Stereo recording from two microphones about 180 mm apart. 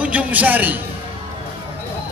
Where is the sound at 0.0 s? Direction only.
10° right (ahead or behind).